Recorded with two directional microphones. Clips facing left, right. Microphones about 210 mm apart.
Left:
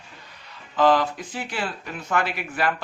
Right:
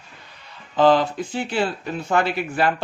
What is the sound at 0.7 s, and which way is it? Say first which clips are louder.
Speech: right 3 dB; 30° right (ahead or behind).